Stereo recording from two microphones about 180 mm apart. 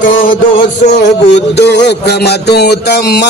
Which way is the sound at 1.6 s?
70° left (ahead or behind).